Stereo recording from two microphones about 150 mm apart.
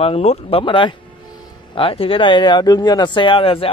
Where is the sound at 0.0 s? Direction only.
40° left (ahead or behind).